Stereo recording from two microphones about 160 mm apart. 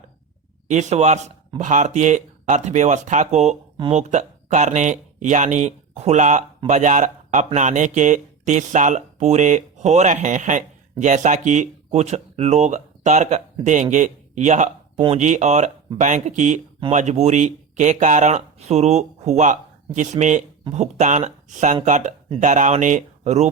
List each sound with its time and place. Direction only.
0.7 s speech: 45° right (ahead or behind)